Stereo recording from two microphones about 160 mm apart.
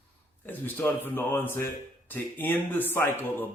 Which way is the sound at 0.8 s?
10° left (ahead or behind).